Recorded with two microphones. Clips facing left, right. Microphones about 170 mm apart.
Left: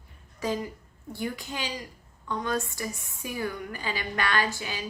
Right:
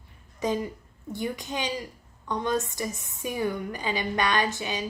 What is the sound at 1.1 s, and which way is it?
A woman's voice, 20° right (ahead or behind).